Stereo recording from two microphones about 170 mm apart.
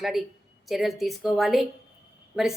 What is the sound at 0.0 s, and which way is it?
A woman's voice, centre (ahead or behind).